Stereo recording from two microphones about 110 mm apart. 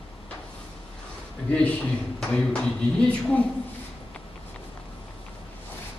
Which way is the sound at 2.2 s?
10° left (ahead or behind).